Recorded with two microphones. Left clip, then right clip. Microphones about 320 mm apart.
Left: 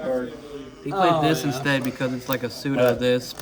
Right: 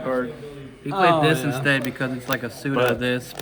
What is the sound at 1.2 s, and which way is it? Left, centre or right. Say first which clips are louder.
A man's voice: right 2 dB; left.